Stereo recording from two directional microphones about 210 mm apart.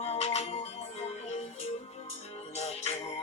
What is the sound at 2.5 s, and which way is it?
Music, 30° left (ahead or behind).